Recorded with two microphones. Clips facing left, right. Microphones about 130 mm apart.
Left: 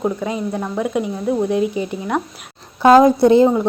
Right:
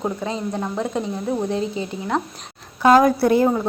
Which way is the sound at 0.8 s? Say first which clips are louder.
Left 4 dB; 15° left (ahead or behind).